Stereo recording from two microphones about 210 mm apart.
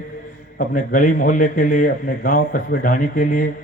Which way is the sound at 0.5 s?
40° left (ahead or behind).